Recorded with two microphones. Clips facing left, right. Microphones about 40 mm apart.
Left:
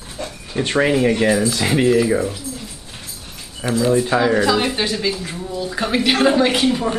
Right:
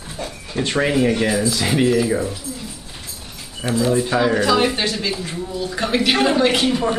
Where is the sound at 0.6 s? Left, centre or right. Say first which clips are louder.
Left 2 dB; left.